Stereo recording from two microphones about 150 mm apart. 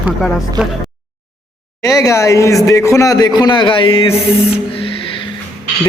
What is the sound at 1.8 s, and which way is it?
Speech, 20° left (ahead or behind).